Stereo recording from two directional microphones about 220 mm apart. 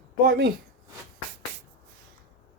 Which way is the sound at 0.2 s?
45° right (ahead or behind).